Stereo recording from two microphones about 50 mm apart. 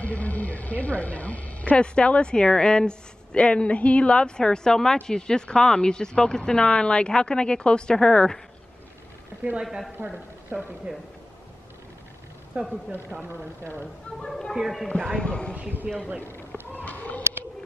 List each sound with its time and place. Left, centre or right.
0.0 s speech: left; by 8.4 s centre
9.6 s speech: centre
9.9 s a woman's voice: right
12.6 s speech: right
12.9 s speech: right
14.5 s speech: centre
15.0 s speech: centre
15.9 s speech: centre
16.7 s a sound: left